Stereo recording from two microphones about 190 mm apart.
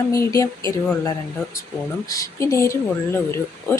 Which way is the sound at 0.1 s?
15° left (ahead or behind).